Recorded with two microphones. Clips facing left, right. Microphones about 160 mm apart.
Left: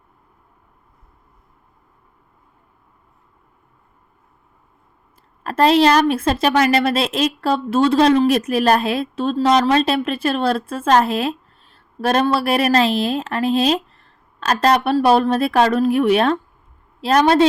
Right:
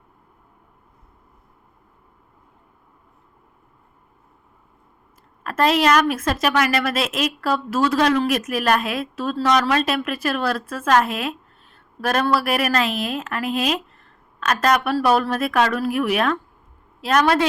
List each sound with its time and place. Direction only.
5.4 s a woman's voice: 30° left (ahead or behind)